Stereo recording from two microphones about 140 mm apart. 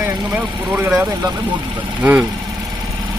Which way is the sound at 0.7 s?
10° right (ahead or behind).